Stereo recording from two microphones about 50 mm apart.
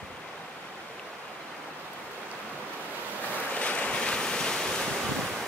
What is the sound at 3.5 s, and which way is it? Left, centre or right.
Waves, left.